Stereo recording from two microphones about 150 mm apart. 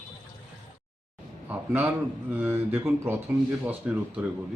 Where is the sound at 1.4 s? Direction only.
10° right (ahead or behind).